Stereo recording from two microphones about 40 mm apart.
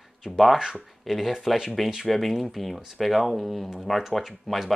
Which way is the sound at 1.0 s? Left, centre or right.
Centre.